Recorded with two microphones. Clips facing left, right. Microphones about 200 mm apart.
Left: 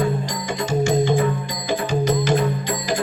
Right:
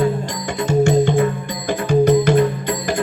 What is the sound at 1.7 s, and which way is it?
Music, 60° right (ahead or behind).